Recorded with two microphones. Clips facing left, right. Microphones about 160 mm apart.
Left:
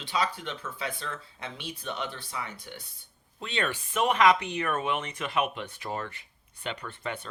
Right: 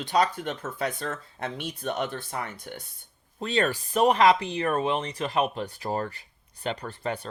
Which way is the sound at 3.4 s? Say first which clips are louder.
Right 6 dB; 40° right (ahead or behind).